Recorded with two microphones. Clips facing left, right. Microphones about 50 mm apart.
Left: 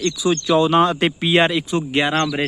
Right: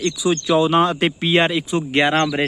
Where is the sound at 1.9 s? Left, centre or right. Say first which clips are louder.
Right 3 dB; right.